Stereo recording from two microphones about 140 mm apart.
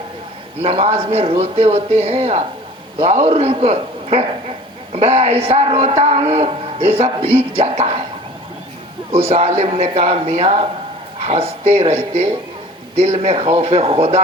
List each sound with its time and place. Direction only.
0.6 s a man's voice: 45° right (ahead or behind)
9.3 s a man's voice: 50° right (ahead or behind)
13.0 s a man's voice: 45° right (ahead or behind)